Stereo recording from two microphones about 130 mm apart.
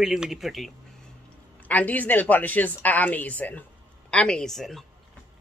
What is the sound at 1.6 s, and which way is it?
Speech, 10° left (ahead or behind).